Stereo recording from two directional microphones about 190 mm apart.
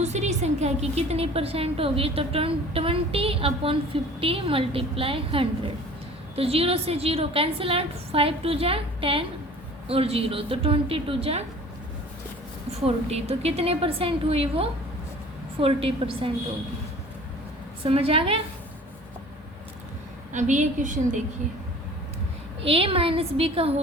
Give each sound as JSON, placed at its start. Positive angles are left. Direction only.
{"t": 0.0, "sound": "a woman's voice", "side_deg": -35}
{"t": 12.8, "sound": "a woman's voice", "side_deg": -35}
{"t": 17.8, "sound": "a woman's voice", "side_deg": -30}
{"t": 20.3, "sound": "a woman's voice", "side_deg": -40}
{"t": 22.6, "sound": "a woman's voice", "side_deg": -30}